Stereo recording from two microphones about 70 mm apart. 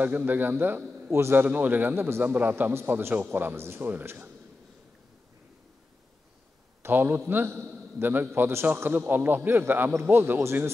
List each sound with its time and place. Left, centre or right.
0.0 s a man's voice: right
6.8 s a man's voice: right